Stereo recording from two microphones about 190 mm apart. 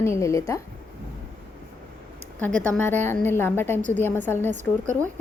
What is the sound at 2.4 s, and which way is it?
Speech, 10° left (ahead or behind).